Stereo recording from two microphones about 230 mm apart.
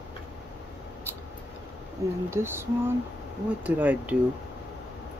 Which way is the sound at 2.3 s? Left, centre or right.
Centre.